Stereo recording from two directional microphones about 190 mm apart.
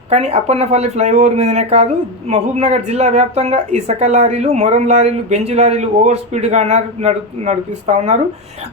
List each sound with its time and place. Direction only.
0.1 s speech: 35° right (ahead or behind)